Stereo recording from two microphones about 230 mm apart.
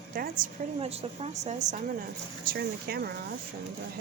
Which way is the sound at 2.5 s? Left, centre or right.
Right.